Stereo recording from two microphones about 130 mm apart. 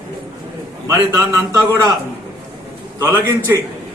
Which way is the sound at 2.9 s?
20° right (ahead or behind).